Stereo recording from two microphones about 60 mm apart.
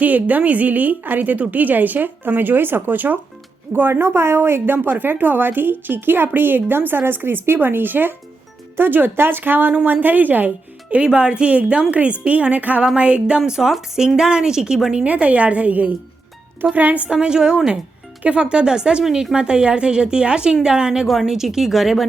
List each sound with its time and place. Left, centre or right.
0.0 s a woman's voice: right
10.8 s a woman's voice: centre
15.0 s a woman's voice: right
17.1 s a woman's voice: centre